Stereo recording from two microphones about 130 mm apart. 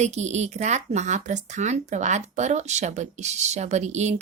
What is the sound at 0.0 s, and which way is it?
A woman's voice, 60° right (ahead or behind).